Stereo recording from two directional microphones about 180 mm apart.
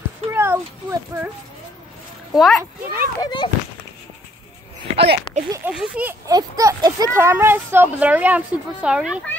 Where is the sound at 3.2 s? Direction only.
25° left (ahead or behind).